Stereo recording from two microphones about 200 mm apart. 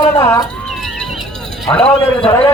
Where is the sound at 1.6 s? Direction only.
5° left (ahead or behind).